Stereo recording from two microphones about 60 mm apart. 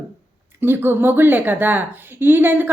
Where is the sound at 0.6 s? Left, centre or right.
Right.